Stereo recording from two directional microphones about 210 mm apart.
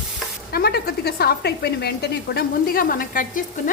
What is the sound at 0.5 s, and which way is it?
Speech, 45° left (ahead or behind).